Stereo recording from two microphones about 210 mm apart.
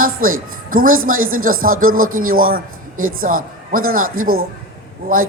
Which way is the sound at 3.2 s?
40° right (ahead or behind).